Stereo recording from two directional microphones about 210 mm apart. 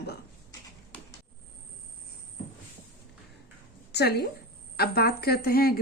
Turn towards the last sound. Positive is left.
turn(degrees=45)  # may be behind; listen again after turning